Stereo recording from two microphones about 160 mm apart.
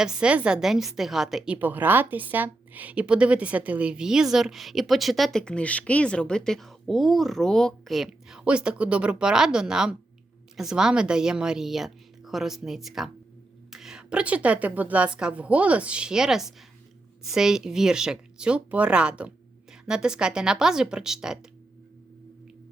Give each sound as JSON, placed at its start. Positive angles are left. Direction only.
{"t": 0.0, "sound": "a woman's voice", "side_deg": -5}